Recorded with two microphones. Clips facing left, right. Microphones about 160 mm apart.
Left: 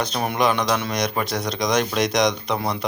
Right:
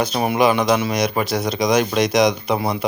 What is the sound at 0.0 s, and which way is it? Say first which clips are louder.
Speech: right 4 dB; 5° right (ahead or behind).